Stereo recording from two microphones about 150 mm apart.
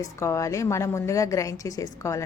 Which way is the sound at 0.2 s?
20° left (ahead or behind).